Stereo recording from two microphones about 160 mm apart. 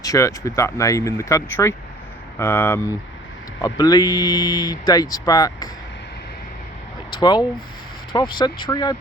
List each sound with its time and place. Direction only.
0.0 s speech: 20° left (ahead or behind)
7.2 s speech: 25° left (ahead or behind)